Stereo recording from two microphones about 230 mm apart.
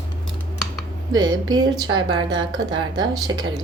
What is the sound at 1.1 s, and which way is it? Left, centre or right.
Speech, centre.